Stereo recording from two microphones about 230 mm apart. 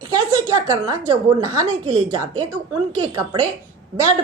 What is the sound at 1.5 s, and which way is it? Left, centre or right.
Speech, centre.